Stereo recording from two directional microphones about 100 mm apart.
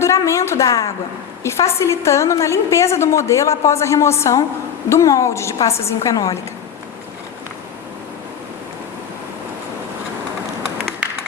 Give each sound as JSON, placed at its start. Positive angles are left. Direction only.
{"t": 0.3, "sound": "a woman's voice", "side_deg": 30}